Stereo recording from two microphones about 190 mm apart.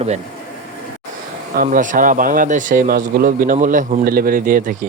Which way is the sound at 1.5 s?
45° right (ahead or behind).